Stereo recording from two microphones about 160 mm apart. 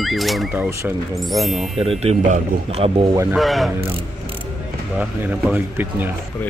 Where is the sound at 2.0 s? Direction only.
40° right (ahead or behind).